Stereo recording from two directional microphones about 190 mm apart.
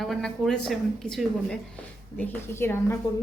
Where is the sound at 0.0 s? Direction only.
Centre (ahead or behind).